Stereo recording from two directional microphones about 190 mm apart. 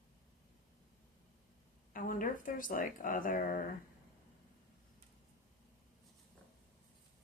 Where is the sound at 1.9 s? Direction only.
45° left (ahead or behind).